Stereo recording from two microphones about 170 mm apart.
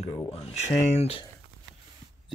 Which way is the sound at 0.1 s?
35° left (ahead or behind).